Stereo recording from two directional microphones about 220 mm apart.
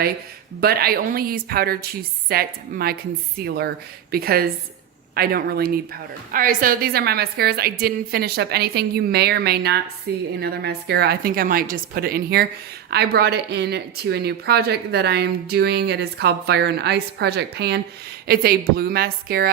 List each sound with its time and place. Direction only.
0.6 s a woman's voice: 45° right (ahead or behind)